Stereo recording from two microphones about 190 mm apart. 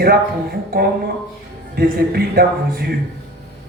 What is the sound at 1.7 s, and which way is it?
Speech, 55° right (ahead or behind).